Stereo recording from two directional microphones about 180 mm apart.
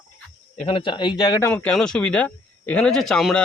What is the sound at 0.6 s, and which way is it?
Speech, 30° left (ahead or behind).